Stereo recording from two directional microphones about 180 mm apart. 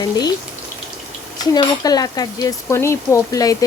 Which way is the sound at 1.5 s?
20° left (ahead or behind).